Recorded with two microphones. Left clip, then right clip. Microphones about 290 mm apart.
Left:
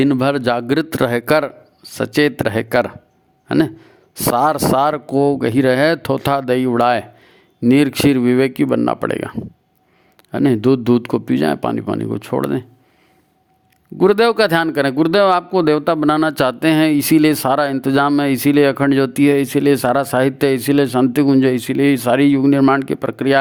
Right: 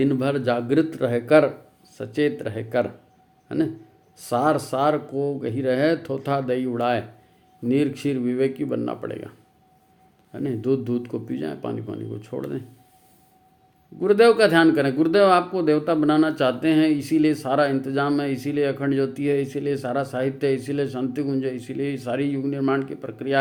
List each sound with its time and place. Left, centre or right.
0.0 s speech: left
10.3 s speech: left
14.0 s speech: left